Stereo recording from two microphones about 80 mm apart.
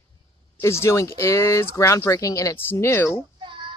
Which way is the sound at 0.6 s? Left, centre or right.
Left.